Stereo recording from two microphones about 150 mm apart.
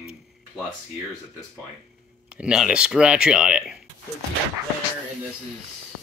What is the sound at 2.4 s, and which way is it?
Speech, 5° right (ahead or behind).